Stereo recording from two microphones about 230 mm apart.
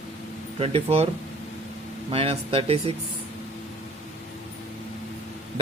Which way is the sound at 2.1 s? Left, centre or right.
Right.